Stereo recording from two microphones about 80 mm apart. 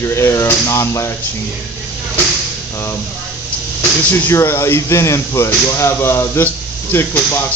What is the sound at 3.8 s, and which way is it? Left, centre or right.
Speech, left.